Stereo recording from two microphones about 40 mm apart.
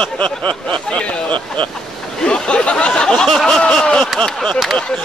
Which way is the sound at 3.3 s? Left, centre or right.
Centre.